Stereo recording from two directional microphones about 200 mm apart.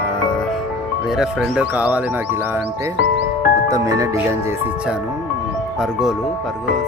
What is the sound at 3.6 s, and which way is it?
Speech, 15° right (ahead or behind).